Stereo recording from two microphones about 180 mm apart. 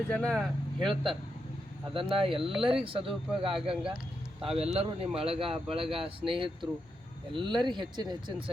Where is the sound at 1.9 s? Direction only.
30° right (ahead or behind).